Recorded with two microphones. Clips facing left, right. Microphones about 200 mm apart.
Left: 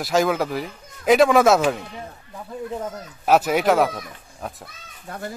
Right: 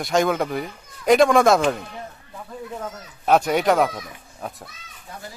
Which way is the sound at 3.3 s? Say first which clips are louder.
Even; 5° left (ahead or behind).